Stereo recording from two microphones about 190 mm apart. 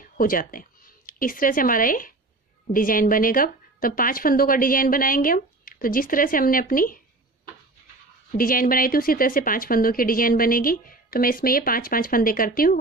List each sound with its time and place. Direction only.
0.2 s speech: 45° left (ahead or behind)
8.3 s speech: 50° left (ahead or behind)